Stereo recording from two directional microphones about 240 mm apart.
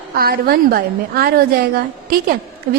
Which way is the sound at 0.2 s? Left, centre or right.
Right.